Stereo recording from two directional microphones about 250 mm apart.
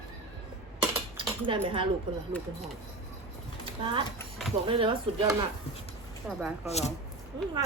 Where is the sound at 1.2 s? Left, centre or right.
Centre.